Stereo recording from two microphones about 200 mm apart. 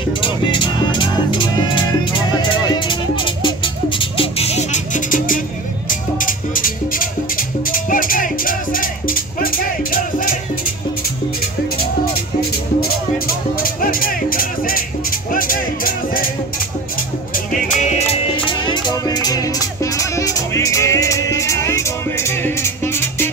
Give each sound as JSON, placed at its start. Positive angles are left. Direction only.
{"t": 0.2, "sound": "music", "side_deg": 25}
{"t": 13.3, "sound": "music", "side_deg": 45}
{"t": 17.5, "sound": "music", "side_deg": 35}